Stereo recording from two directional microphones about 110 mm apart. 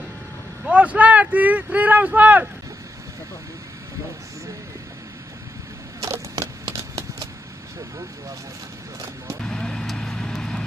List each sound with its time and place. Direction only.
0.7 s speech: 15° right (ahead or behind)
5.9 s a sound: 30° right (ahead or behind)
9.4 s vehicle: 5° left (ahead or behind)